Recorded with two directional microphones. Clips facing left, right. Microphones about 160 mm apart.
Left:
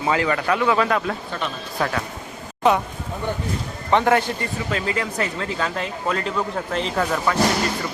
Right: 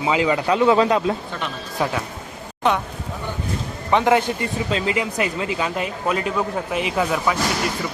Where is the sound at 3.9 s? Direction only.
15° right (ahead or behind).